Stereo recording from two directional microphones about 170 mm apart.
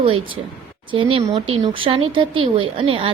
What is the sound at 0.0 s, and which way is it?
A woman's voice, 30° right (ahead or behind).